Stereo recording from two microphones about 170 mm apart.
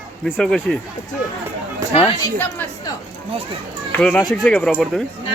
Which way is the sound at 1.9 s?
35° left (ahead or behind).